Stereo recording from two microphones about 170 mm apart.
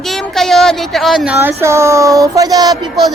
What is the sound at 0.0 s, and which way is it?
A woman's voice, centre (ahead or behind).